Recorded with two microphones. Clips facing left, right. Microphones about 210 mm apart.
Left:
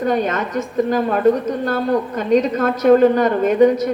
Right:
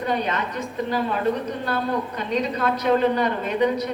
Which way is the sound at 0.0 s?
45° left (ahead or behind).